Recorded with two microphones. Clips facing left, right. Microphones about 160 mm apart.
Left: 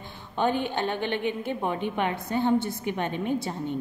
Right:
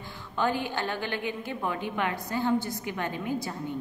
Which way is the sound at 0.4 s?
20° left (ahead or behind).